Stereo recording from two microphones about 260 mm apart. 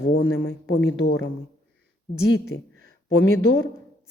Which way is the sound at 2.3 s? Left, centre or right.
Left.